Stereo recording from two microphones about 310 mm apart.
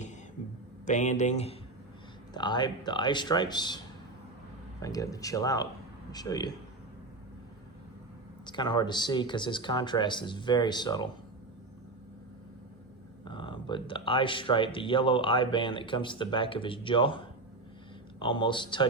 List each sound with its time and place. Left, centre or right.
0.9 s speech: left
4.8 s speech: centre
8.4 s speech: centre
13.2 s speech: centre